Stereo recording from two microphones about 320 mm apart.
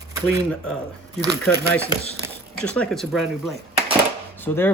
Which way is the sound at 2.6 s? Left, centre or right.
Centre.